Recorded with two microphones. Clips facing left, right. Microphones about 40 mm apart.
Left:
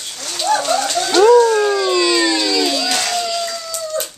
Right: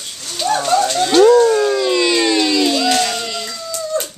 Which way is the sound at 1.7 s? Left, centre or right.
Centre.